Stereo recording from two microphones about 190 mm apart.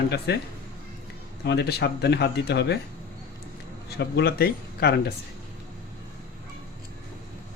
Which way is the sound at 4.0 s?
60° left (ahead or behind).